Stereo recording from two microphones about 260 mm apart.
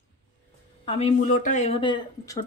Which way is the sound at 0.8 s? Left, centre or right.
Left.